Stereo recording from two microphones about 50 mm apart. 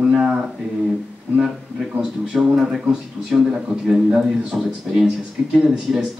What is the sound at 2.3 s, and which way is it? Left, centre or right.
Speech, centre.